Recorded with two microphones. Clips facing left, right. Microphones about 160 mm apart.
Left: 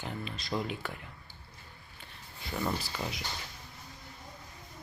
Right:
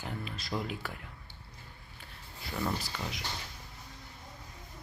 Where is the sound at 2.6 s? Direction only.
5° left (ahead or behind).